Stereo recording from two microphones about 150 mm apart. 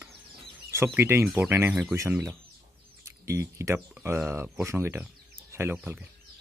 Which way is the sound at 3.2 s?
20° right (ahead or behind).